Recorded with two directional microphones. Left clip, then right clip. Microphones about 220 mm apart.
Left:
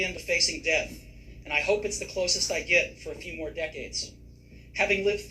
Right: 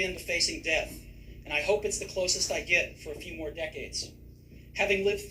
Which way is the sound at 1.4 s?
15° left (ahead or behind).